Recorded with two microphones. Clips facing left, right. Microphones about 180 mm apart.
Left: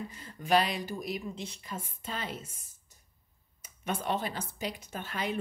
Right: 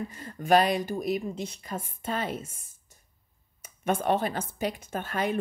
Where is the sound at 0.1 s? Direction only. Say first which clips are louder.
Right 5 dB; 50° right (ahead or behind).